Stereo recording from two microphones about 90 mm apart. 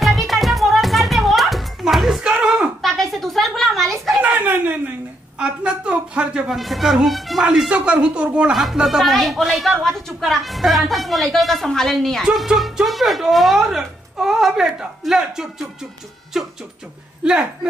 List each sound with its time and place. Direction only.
0.0 s music: centre (ahead or behind)
2.8 s a sound: centre (ahead or behind)
4.2 s a sound: 20° right (ahead or behind)
6.5 s speech: centre (ahead or behind)
12.2 s speech: 5° right (ahead or behind)
17.2 s speech: 10° right (ahead or behind)